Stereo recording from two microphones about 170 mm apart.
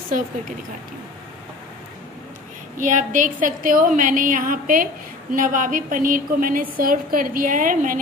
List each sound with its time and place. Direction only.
2.8 s a woman's voice: 50° right (ahead or behind)